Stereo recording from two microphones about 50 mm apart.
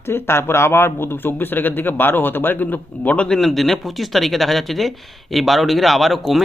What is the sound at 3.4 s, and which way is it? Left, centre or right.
Speech, centre.